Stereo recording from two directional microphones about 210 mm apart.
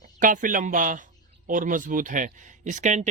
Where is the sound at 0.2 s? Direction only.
40° right (ahead or behind).